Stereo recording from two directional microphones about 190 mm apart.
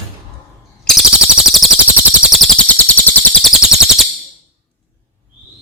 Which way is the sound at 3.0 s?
10° left (ahead or behind).